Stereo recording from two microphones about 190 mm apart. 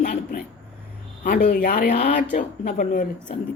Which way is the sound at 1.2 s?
45° left (ahead or behind).